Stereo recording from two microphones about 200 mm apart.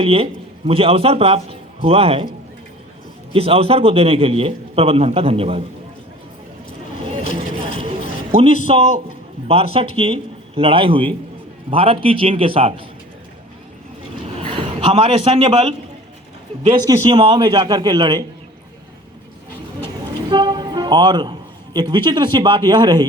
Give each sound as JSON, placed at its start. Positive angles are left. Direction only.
{"t": 0.0, "sound": "a man's voice", "side_deg": -30}
{"t": 3.3, "sound": "a man's voice", "side_deg": -30}
{"t": 7.7, "sound": "a sound", "side_deg": -30}
{"t": 8.6, "sound": "a man's voice", "side_deg": -30}
{"t": 14.3, "sound": "a sound", "side_deg": -30}
{"t": 16.6, "sound": "a man's voice", "side_deg": -20}
{"t": 20.3, "sound": "a man's voice", "side_deg": -20}